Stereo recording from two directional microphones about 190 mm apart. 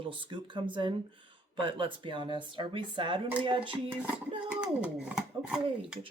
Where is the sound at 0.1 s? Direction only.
25° right (ahead or behind).